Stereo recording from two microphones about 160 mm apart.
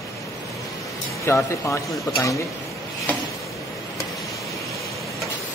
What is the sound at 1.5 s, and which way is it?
Speech, 20° left (ahead or behind).